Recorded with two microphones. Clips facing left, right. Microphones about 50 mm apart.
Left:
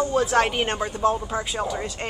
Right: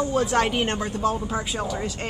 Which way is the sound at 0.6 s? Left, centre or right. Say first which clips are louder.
Left 1 dB; centre.